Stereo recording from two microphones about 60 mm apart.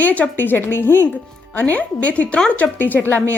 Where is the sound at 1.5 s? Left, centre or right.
Left.